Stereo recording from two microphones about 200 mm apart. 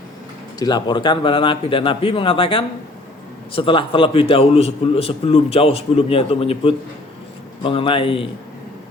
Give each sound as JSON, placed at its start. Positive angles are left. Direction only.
{"t": 0.6, "sound": "a man's voice", "side_deg": 20}